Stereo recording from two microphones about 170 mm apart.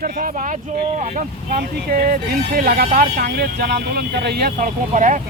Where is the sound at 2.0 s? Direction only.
60° right (ahead or behind).